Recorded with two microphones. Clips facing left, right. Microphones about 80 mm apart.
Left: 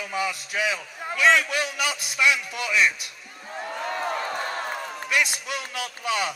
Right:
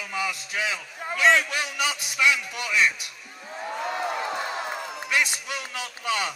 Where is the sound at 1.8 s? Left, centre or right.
Right.